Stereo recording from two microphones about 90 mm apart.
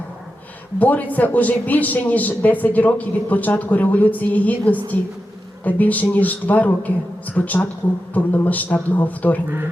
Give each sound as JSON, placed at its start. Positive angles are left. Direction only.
{"t": 0.8, "sound": "a man's voice", "side_deg": 20}